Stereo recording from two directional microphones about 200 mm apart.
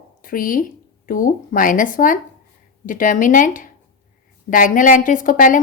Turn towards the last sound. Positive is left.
turn(degrees=40)  # may be behind; listen again after turning